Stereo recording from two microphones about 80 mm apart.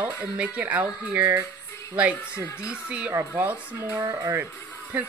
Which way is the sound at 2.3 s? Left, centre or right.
Left.